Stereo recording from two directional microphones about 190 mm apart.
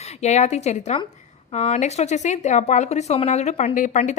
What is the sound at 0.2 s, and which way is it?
Speech, 35° left (ahead or behind).